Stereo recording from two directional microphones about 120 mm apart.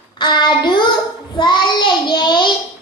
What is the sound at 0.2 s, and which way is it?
Child singing, 40° left (ahead or behind).